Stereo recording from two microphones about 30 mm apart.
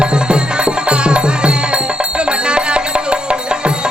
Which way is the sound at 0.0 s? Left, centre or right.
Right.